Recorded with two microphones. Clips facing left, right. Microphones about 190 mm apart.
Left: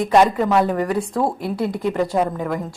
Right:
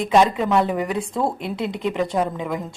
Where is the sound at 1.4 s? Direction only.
20° right (ahead or behind).